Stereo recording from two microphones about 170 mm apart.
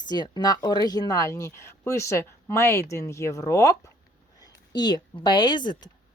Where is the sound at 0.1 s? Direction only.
25° left (ahead or behind).